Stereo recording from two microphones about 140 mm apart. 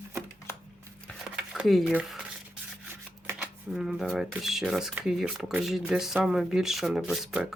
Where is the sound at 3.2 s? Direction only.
15° right (ahead or behind).